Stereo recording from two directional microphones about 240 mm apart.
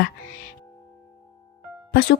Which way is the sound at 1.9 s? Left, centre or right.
Left.